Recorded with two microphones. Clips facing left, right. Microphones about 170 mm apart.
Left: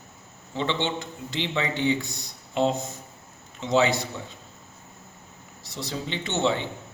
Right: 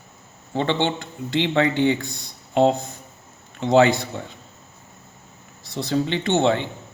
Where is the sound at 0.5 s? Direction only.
55° right (ahead or behind).